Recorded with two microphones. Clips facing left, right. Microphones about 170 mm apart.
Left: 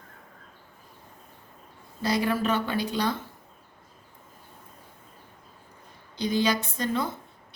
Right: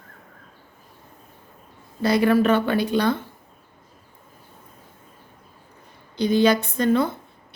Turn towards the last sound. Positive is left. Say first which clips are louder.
# right 8 dB
turn(degrees=-60)  # may be behind; listen again after turning